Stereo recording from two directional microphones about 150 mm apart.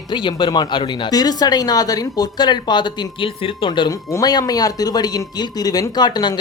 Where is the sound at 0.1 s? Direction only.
30° left (ahead or behind).